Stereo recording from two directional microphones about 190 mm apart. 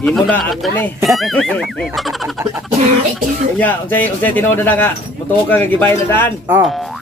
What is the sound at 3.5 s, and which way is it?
Speech, 10° left (ahead or behind).